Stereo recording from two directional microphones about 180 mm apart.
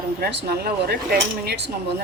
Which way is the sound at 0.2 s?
60° right (ahead or behind).